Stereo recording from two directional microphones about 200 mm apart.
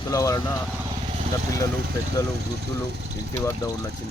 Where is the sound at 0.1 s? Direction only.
15° left (ahead or behind).